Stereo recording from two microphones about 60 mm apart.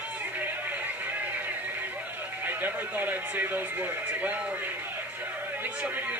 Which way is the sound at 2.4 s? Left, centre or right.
Right.